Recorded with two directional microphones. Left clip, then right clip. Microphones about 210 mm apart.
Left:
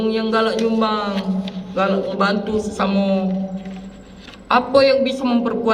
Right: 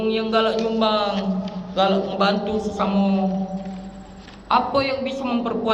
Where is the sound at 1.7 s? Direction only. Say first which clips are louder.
Even; 5° left (ahead or behind); by 3.1 s 25° left (ahead or behind).